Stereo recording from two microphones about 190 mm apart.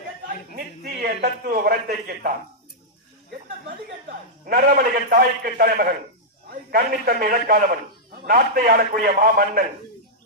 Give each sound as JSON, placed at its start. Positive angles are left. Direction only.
{"t": 0.5, "sound": "a man's voice", "side_deg": -50}
{"t": 4.4, "sound": "a man's voice", "side_deg": -50}